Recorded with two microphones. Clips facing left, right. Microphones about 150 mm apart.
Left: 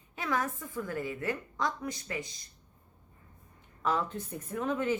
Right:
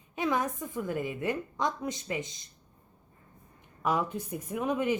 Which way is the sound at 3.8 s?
10° right (ahead or behind).